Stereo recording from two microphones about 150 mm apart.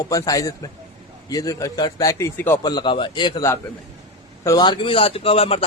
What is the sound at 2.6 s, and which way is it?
A man's voice, 30° left (ahead or behind).